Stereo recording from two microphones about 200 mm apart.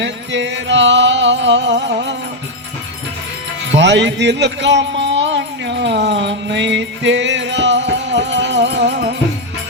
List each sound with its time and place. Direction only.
0.0 s music: 65° right (ahead or behind)
3.8 s a man's voice: 60° right (ahead or behind)